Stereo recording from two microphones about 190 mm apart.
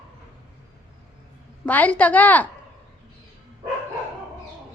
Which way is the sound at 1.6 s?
10° left (ahead or behind).